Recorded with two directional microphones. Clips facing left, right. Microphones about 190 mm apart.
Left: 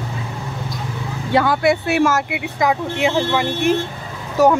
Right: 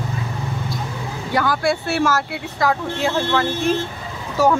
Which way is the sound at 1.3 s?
25° left (ahead or behind).